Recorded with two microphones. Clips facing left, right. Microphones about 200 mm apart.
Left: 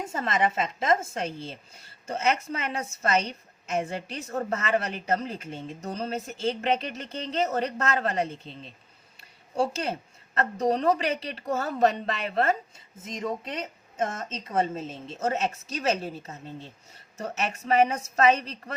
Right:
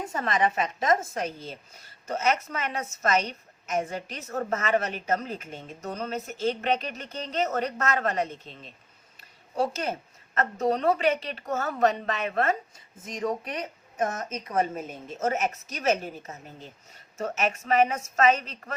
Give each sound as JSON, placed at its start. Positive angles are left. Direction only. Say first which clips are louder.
{"t": 0.1, "sound": "a woman's voice", "louder": "even", "side_deg": 25}
{"t": 9.6, "sound": "a woman's voice", "louder": "left 1 dB", "side_deg": 30}